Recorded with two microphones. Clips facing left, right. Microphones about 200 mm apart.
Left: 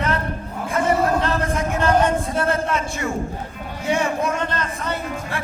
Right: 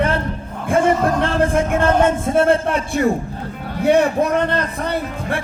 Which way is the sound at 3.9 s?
60° right (ahead or behind).